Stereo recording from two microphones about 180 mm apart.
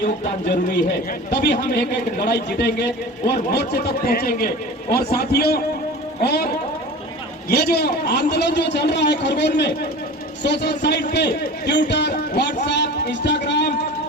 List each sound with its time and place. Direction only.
0.4 s a man's voice: 65° left (ahead or behind)
7.5 s a man's voice: 60° left (ahead or behind)